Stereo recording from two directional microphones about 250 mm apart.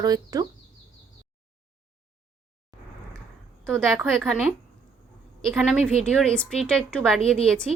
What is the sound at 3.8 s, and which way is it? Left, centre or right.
Speech, centre.